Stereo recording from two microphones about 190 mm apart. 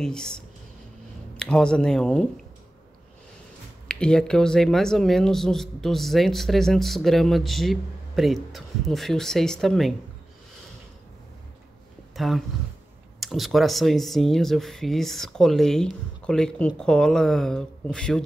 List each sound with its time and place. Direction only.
0.0 s speech: 5° left (ahead or behind)
3.8 s speech: 5° left (ahead or behind)
12.2 s speech: centre (ahead or behind)